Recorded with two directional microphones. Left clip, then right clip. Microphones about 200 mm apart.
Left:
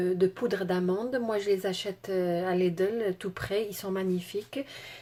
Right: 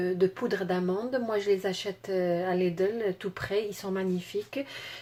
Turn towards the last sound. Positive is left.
turn(degrees=0)  # may be behind; listen again after turning